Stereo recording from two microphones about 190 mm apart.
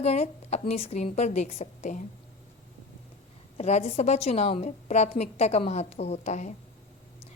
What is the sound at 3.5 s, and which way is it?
A woman's voice, 35° left (ahead or behind).